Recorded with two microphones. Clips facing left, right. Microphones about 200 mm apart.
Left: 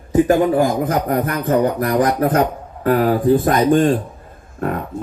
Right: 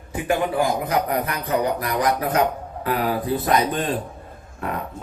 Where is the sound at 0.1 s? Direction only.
40° left (ahead or behind).